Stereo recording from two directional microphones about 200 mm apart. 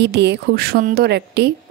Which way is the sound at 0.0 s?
60° right (ahead or behind).